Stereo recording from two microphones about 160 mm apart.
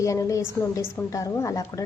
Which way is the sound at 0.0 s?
20° left (ahead or behind).